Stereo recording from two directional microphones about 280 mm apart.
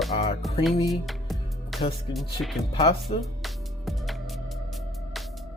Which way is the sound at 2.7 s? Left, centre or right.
Left.